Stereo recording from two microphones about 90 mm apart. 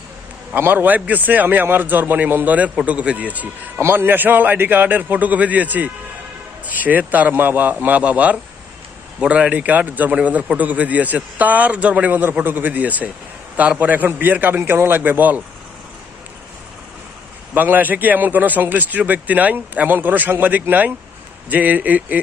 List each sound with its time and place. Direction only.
0.5 s a man's voice: 25° right (ahead or behind)
17.5 s a man's voice: 20° right (ahead or behind)